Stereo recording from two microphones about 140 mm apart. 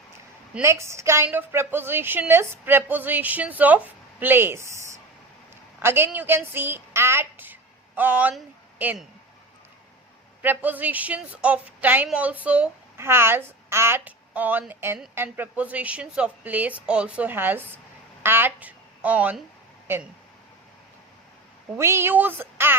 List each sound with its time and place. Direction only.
0.6 s a woman's voice: 20° right (ahead or behind)
5.8 s a woman's voice: 15° right (ahead or behind)
10.4 s a woman's voice: 15° right (ahead or behind)
21.8 s a woman's voice: 20° right (ahead or behind)